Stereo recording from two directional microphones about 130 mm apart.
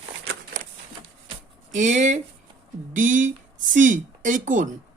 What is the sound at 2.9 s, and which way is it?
A woman's voice, 80° right.